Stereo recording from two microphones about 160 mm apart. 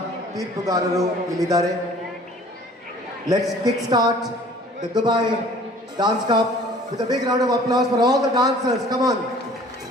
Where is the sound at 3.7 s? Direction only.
25° right (ahead or behind).